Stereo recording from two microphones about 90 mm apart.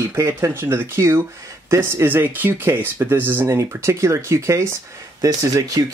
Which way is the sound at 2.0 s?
20° right (ahead or behind).